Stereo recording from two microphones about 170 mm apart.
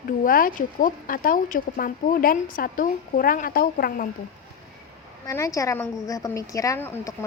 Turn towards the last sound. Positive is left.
turn(degrees=15)  # may be behind; listen again after turning